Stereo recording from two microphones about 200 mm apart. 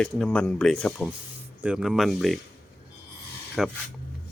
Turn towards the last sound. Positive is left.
turn(degrees=0)  # may be behind; listen again after turning